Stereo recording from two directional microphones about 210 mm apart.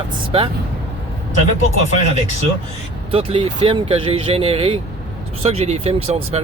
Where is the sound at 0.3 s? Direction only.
25° right (ahead or behind).